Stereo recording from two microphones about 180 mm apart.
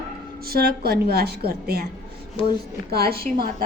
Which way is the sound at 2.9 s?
60° right (ahead or behind).